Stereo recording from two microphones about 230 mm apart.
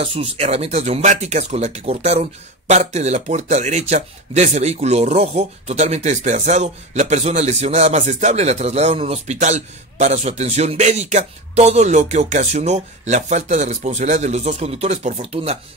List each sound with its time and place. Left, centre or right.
0.0 s speech: right